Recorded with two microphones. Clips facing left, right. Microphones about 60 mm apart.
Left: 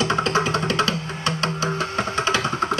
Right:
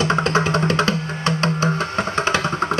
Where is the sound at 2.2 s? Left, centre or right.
Right.